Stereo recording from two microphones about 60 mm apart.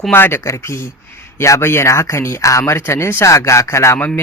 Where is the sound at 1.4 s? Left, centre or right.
Left.